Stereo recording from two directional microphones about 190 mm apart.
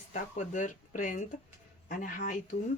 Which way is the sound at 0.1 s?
40° left (ahead or behind).